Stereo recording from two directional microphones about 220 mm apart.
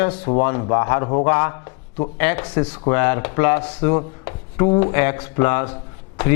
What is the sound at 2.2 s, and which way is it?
A man's voice, 10° left (ahead or behind).